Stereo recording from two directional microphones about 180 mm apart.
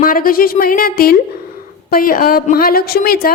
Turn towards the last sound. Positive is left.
turn(degrees=60)  # may be behind; listen again after turning